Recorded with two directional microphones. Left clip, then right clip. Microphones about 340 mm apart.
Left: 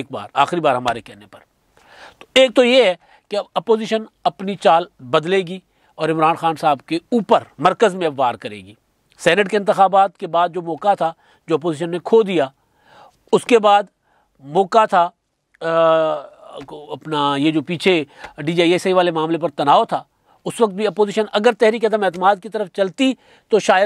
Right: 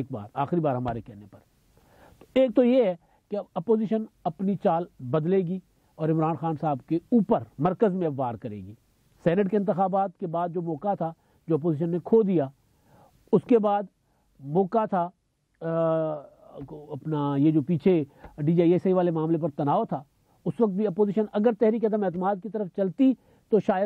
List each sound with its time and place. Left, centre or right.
0.0 s speech: centre
16.6 s speech: left
17.0 s speech: centre